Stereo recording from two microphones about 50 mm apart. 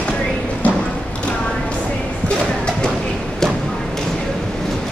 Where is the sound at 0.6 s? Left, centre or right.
Left.